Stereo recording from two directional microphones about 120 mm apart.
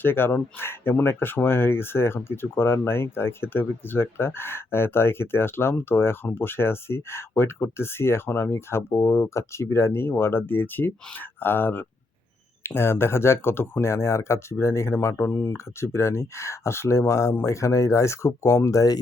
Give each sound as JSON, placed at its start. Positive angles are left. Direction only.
{"t": 0.0, "sound": "speech", "side_deg": 20}